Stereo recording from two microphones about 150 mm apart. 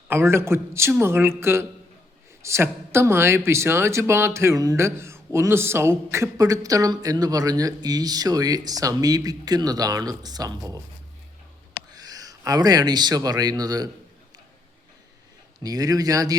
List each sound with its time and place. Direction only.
0.1 s speech: 15° right (ahead or behind)
11.9 s speech: 25° right (ahead or behind)
15.6 s speech: 25° right (ahead or behind)